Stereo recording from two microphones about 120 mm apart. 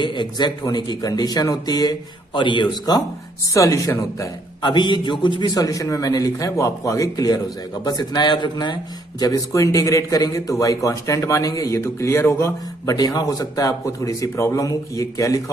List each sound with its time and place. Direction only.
0.0 s a man's voice: 40° left (ahead or behind)
3.5 s a man's voice: 30° left (ahead or behind)
4.6 s a man's voice: 40° left (ahead or behind)
9.2 s a man's voice: 30° left (ahead or behind)